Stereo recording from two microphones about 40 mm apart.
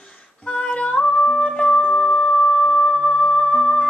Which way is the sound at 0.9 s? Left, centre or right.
Centre.